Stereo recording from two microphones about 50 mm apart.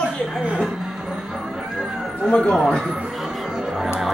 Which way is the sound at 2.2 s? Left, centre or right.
Centre.